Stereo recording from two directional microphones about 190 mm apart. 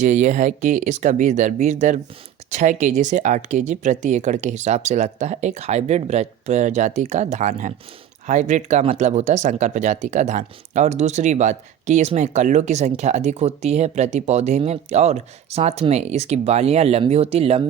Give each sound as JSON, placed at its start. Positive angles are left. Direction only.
{"t": 0.0, "sound": "speech", "side_deg": -40}